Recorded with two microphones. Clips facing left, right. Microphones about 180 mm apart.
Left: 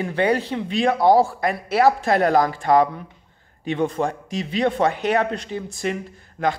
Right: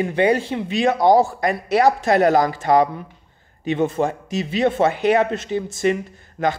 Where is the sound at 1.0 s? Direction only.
Centre (ahead or behind).